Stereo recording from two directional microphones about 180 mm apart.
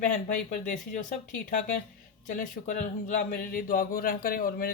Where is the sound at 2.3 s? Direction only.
45° left (ahead or behind).